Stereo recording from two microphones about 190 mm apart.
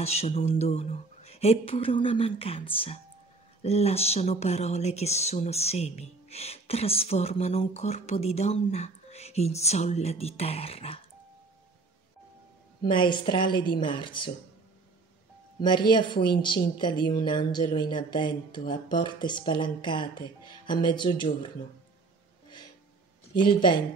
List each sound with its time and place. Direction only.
0.0 s speech: 35° left (ahead or behind)
12.8 s speech: 25° left (ahead or behind)
15.6 s speech: 25° left (ahead or behind)
23.3 s speech: 25° left (ahead or behind)